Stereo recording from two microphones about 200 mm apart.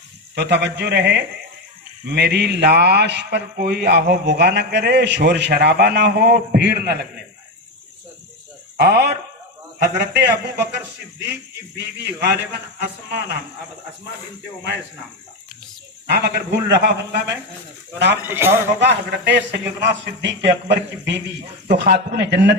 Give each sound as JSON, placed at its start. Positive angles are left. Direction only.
{"t": 0.3, "sound": "speech", "side_deg": -60}
{"t": 8.8, "sound": "speech", "side_deg": -55}
{"t": 11.8, "sound": "speech", "side_deg": -55}
{"t": 16.0, "sound": "speech", "side_deg": -55}
{"t": 18.2, "sound": "a man's voice", "side_deg": -10}
{"t": 18.8, "sound": "speech", "side_deg": -60}